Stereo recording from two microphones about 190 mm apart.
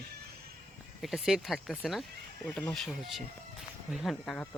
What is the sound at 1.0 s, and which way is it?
Speech, centre (ahead or behind).